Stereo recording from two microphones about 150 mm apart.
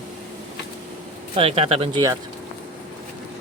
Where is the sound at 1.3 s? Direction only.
40° right (ahead or behind).